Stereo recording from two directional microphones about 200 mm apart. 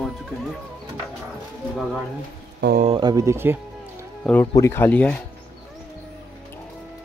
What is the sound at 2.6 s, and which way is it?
Speech, 50° right (ahead or behind).